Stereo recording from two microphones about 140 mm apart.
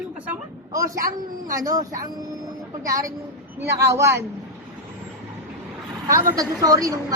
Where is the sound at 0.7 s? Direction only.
20° right (ahead or behind).